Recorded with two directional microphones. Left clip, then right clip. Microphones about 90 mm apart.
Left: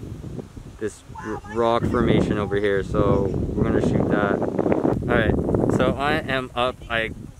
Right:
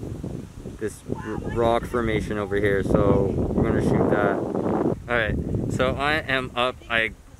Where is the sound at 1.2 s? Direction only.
50° left (ahead or behind).